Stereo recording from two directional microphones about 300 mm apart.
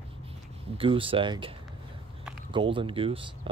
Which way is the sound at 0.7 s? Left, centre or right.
Centre.